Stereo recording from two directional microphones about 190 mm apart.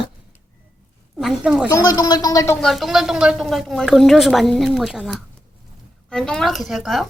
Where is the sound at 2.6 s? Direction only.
Centre (ahead or behind).